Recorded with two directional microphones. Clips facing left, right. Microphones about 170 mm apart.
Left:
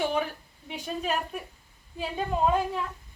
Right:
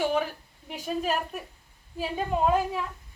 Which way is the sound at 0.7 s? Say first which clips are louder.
Right 2 dB; centre (ahead or behind).